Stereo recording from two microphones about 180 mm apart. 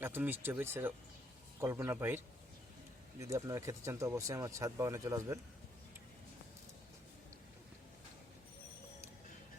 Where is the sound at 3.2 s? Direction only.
20° right (ahead or behind).